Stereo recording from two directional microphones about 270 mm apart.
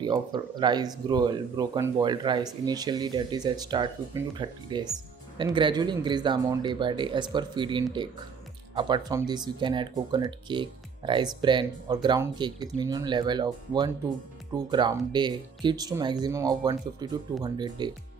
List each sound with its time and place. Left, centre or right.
0.0 s speech: centre